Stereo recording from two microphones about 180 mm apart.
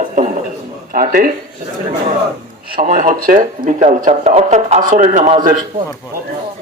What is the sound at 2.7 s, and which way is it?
A man's voice, 50° right (ahead or behind).